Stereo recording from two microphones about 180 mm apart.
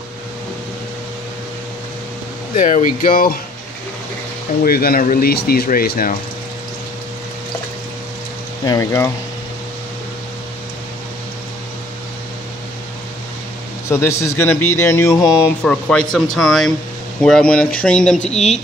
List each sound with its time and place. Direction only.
2.5 s speech: 45° left (ahead or behind)
4.6 s speech: 55° left (ahead or behind)
8.6 s a man's voice: 15° left (ahead or behind)
13.8 s a man's voice: 15° left (ahead or behind)